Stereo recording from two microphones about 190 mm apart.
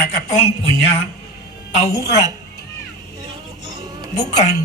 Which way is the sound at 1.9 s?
15° left (ahead or behind).